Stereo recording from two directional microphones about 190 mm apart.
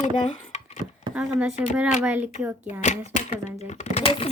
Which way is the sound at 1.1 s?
5° right (ahead or behind).